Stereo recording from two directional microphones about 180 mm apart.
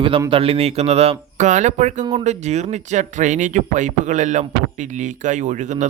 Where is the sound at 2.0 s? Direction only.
25° right (ahead or behind).